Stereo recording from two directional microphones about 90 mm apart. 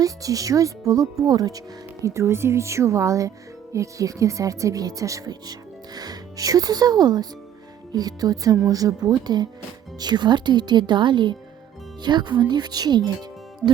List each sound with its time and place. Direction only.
0.0 s speech: 40° right (ahead or behind)